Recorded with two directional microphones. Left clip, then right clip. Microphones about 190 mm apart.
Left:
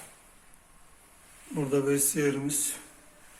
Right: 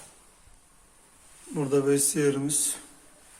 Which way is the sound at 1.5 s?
20° right (ahead or behind).